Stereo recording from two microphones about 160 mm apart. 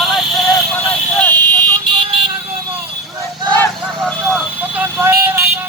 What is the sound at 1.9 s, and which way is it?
Vehicle, 30° right (ahead or behind).